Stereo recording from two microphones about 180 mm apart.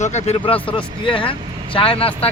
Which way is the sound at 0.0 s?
40° left (ahead or behind).